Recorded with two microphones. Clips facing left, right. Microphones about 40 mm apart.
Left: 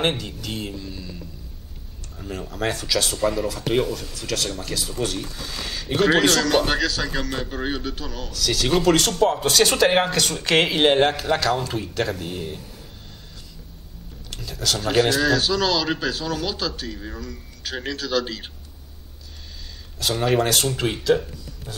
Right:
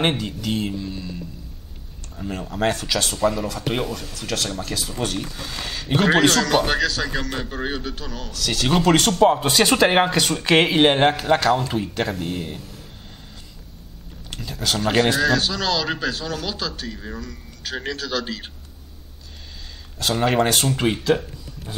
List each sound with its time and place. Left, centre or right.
0.1 s speech: centre
2.1 s speech: centre
14.3 s a sound: centre
14.8 s speech: centre
20.0 s speech: centre